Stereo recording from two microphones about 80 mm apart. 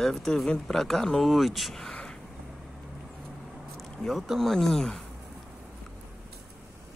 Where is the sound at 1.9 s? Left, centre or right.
Centre.